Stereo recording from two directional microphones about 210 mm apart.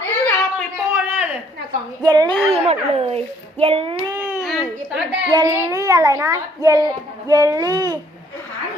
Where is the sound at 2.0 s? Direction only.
20° right (ahead or behind).